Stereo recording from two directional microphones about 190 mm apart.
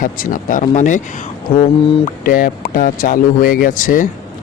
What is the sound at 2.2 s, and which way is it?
A man's voice, 45° left (ahead or behind).